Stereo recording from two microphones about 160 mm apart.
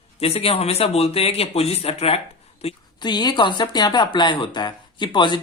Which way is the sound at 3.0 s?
25° left (ahead or behind).